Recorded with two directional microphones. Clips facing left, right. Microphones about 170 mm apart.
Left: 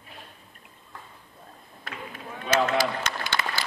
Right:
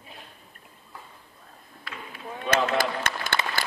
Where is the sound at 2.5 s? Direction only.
55° right (ahead or behind).